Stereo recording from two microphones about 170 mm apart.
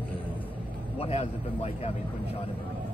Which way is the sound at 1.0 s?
40° left (ahead or behind).